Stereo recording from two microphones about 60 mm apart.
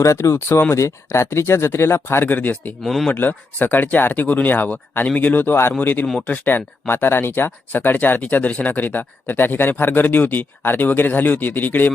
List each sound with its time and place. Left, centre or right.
0.0 s speech: left
2.8 s speech: centre
3.2 s speech: left